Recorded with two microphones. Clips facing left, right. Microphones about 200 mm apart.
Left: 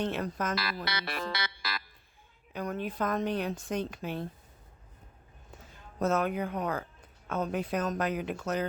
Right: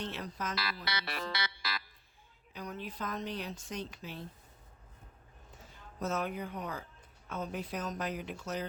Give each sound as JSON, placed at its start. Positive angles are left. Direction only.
{"t": 0.0, "sound": "speech", "side_deg": 50}
{"t": 6.0, "sound": "speech", "side_deg": 55}